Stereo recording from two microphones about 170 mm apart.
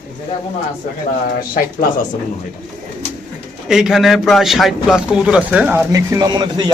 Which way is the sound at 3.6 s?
5° right (ahead or behind).